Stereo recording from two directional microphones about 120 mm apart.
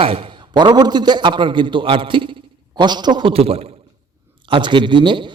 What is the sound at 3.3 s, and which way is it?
Speech, 55° right (ahead or behind).